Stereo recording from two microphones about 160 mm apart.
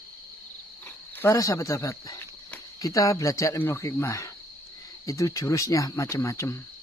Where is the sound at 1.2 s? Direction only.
20° left (ahead or behind).